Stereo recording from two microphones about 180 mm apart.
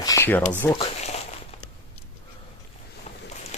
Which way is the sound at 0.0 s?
15° left (ahead or behind).